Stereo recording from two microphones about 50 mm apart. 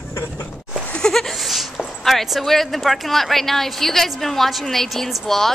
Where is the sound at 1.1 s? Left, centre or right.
Centre.